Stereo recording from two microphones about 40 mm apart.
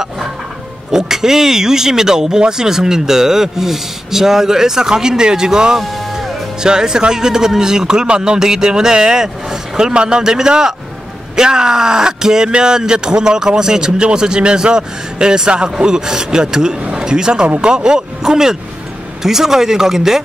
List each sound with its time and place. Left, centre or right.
0.9 s speech: centre